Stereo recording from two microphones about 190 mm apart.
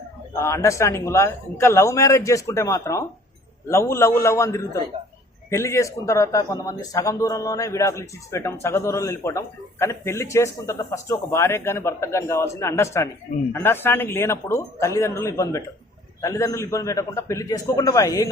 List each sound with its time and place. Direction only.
0.3 s a man's voice: 15° left (ahead or behind)